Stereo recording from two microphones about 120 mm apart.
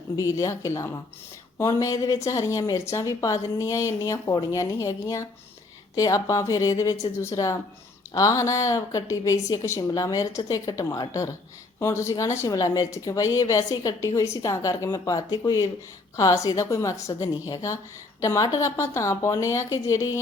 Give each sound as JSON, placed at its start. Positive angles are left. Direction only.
{"t": 0.2, "sound": "speech", "side_deg": 25}